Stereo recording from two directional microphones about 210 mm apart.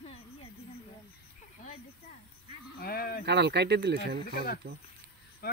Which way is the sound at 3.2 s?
55° right (ahead or behind).